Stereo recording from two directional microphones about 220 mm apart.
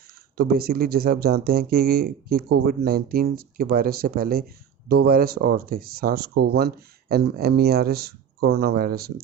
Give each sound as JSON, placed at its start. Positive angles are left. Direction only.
{"t": 0.3, "sound": "speech", "side_deg": -45}